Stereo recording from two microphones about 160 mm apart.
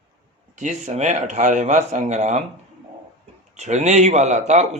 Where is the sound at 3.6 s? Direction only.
45° right (ahead or behind).